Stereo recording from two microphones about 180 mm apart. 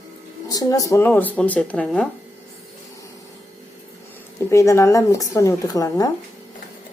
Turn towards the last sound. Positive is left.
turn(degrees=20)  # may be behind; listen again after turning